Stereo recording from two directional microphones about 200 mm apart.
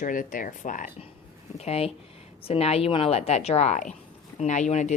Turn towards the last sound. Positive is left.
turn(degrees=35)  # may be behind; listen again after turning